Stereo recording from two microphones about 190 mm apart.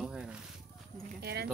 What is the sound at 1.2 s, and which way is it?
Speech, 55° right (ahead or behind).